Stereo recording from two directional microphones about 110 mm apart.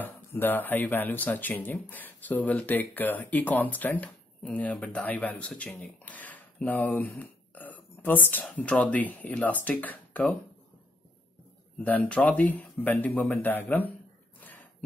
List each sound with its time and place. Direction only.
0.0 s speech: 20° left (ahead or behind)
11.8 s speech: 15° left (ahead or behind)
14.4 s a sound: 15° left (ahead or behind)